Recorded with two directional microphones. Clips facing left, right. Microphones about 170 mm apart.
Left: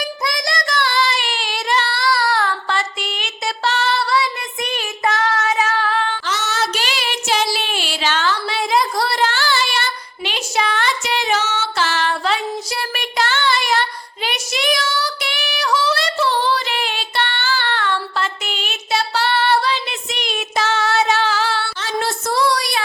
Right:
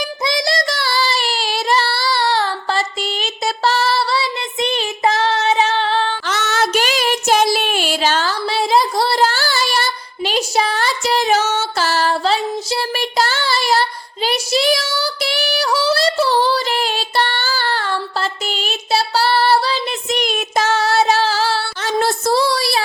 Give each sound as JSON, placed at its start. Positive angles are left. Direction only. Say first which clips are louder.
{"t": 0.3, "sound": "child singing", "louder": "right 6 dB", "side_deg": -30}
{"t": 6.2, "sound": "music", "louder": "right 3 dB", "side_deg": -55}